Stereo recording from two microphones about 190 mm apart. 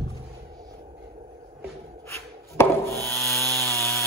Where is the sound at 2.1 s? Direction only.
15° left (ahead or behind).